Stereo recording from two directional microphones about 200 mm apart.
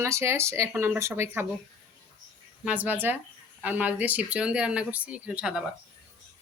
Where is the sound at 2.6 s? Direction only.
10° right (ahead or behind).